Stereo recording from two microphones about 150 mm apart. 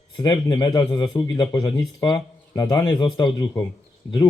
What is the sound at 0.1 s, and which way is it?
A man's voice, 30° left (ahead or behind).